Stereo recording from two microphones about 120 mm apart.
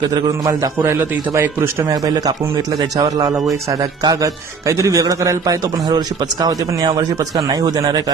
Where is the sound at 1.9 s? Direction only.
30° right (ahead or behind).